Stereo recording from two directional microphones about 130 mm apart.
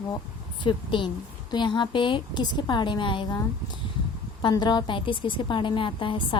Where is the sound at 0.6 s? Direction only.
40° left (ahead or behind).